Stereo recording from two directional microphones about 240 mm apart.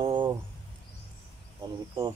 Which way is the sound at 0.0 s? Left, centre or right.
Centre.